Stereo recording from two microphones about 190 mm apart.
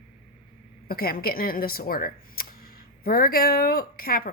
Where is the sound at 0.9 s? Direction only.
50° left (ahead or behind).